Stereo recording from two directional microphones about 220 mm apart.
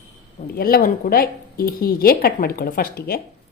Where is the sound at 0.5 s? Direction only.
45° left (ahead or behind).